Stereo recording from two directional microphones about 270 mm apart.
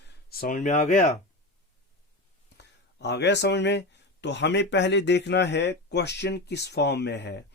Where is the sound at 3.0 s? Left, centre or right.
Left.